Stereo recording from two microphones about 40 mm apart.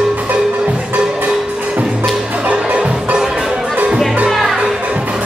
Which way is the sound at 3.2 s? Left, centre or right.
Centre.